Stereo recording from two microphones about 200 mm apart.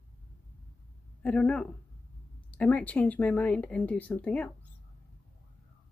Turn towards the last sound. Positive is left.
turn(degrees=5)  # may be behind; listen again after turning